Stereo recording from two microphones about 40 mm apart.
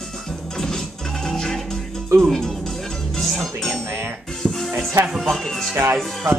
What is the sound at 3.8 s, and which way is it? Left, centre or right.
Music, right.